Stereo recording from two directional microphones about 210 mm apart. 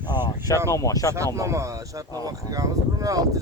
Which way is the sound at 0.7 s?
15° left (ahead or behind).